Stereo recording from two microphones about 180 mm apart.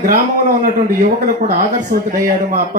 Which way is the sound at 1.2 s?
50° right (ahead or behind).